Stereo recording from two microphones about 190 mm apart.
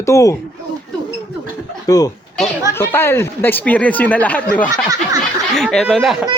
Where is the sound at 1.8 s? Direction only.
20° left (ahead or behind); by 6.2 s centre (ahead or behind).